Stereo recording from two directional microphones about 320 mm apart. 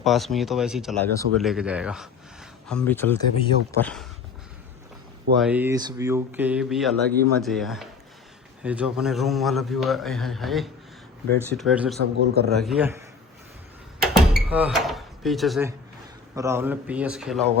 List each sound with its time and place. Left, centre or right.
0.0 s speech: centre
5.4 s speech: centre
11.9 s a man's voice: right
12.5 s speech: centre
14.0 s a sound: centre
16.3 s speech: centre